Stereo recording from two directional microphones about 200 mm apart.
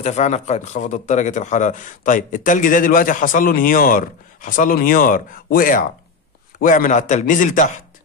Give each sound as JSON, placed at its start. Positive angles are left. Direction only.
{"t": 0.0, "sound": "speech", "side_deg": 35}